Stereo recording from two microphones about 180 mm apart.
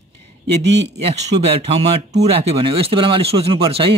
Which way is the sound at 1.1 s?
35° right (ahead or behind).